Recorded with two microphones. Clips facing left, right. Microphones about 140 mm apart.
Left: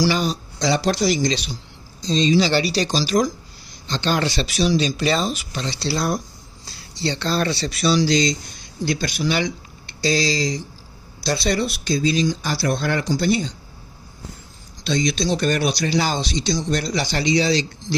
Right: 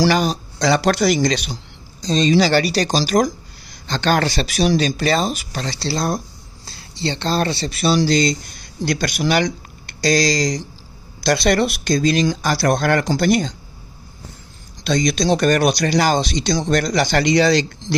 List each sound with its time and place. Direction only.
0.0 s speech: 60° right (ahead or behind); by 7.4 s 25° right (ahead or behind)
7.4 s speech: 50° right (ahead or behind)
8.8 s speech: 70° right (ahead or behind)
10.0 s speech: 45° right (ahead or behind)
11.2 s speech: 90° right
12.1 s speech: 75° right (ahead or behind)
14.9 s speech: 45° right (ahead or behind)
16.6 s speech: 90° right
17.0 s speech: 55° right (ahead or behind)